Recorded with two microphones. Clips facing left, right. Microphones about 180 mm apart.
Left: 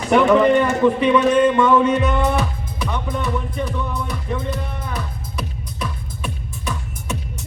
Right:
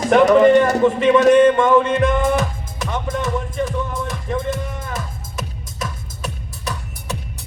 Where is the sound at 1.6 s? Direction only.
45° right (ahead or behind).